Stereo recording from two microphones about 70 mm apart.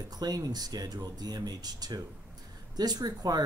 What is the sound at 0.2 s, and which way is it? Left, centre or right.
Speech, right.